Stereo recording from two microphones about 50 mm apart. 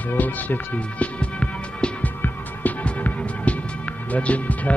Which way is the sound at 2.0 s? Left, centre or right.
Left.